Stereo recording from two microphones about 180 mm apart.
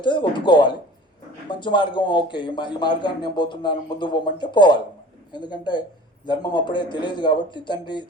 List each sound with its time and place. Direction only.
0.0 s a man's voice: 25° left (ahead or behind)